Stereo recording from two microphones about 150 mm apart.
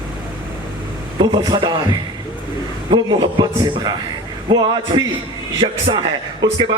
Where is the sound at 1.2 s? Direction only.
30° right (ahead or behind).